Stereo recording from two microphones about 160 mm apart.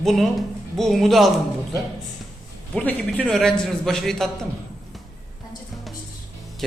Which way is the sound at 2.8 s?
10° left (ahead or behind).